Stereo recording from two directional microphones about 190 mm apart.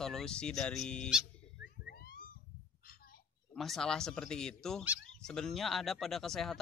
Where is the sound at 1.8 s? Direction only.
50° left (ahead or behind).